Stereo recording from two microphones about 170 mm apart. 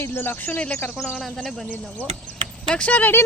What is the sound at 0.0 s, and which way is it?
Speech, 15° left (ahead or behind).